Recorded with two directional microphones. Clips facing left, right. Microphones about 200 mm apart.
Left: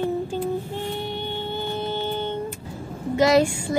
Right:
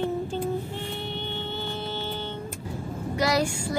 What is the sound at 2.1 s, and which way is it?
Vehicle, 55° left (ahead or behind).